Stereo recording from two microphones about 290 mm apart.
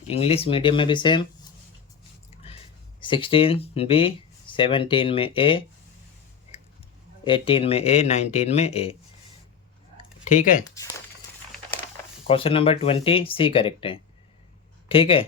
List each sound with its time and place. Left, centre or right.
0.1 s speech: left
3.0 s speech: centre
7.3 s speech: centre
12.3 s speech: centre